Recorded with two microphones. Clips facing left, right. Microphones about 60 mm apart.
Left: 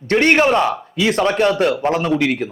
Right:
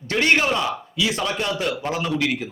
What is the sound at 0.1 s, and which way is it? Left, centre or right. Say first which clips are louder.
Speech: left 6 dB; left.